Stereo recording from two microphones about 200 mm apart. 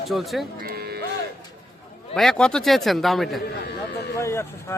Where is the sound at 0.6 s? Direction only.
50° right (ahead or behind).